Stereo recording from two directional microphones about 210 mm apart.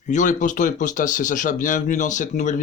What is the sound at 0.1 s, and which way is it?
Speech, 35° left (ahead or behind).